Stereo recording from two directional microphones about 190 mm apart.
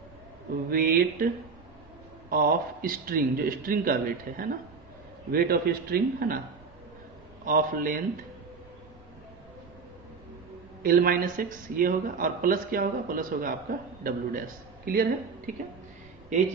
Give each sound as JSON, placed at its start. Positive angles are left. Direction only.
{"t": 0.7, "sound": "speech", "side_deg": -50}
{"t": 7.4, "sound": "speech", "side_deg": -50}
{"t": 10.8, "sound": "speech", "side_deg": -50}